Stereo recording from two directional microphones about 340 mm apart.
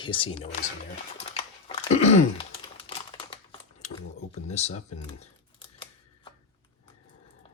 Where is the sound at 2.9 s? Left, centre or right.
Centre.